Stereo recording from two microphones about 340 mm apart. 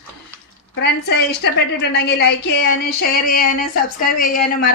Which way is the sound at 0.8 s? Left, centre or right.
Left.